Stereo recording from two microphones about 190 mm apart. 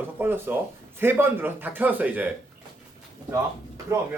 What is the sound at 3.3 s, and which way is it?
Speech, 15° right (ahead or behind).